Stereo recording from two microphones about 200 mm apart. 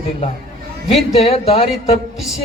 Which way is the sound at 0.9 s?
30° left (ahead or behind).